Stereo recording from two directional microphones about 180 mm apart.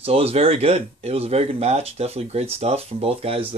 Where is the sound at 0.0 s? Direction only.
35° right (ahead or behind).